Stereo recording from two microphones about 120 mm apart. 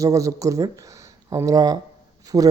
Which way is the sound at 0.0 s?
25° right (ahead or behind).